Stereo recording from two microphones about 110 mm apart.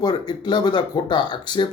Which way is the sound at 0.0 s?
40° left (ahead or behind).